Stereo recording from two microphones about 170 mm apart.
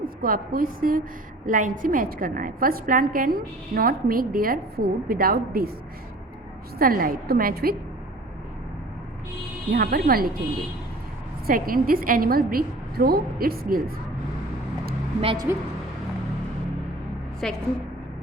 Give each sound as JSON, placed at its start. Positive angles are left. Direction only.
{"t": 0.2, "sound": "a woman's voice", "side_deg": -60}
{"t": 6.7, "sound": "a woman's voice", "side_deg": -60}
{"t": 9.7, "sound": "a woman's voice", "side_deg": -60}
{"t": 11.4, "sound": "a woman's voice", "side_deg": -55}
{"t": 15.2, "sound": "speech", "side_deg": -30}
{"t": 17.4, "sound": "a woman's voice", "side_deg": 0}